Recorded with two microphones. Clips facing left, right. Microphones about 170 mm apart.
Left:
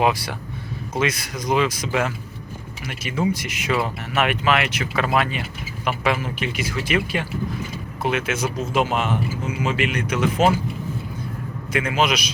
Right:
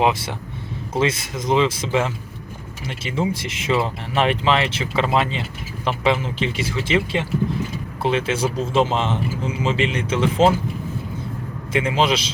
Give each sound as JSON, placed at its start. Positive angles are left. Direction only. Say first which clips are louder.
{"t": 0.0, "sound": "speech", "louder": "right 1 dB", "side_deg": -25}
{"t": 11.7, "sound": "speech", "louder": "right 2 dB", "side_deg": -25}